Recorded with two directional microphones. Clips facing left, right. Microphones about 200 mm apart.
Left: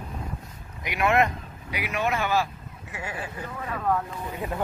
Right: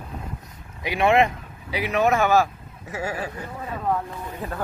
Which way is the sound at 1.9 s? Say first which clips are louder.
Right 7 dB; 40° right (ahead or behind).